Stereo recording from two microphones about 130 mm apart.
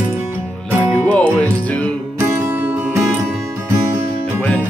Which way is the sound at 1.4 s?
10° left (ahead or behind).